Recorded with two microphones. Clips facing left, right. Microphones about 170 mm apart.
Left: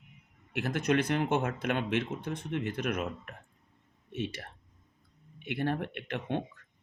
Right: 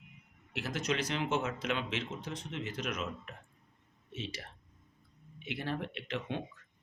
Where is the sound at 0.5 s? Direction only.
55° left (ahead or behind).